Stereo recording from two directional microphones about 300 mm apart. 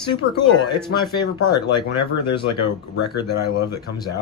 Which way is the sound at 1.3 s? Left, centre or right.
Centre.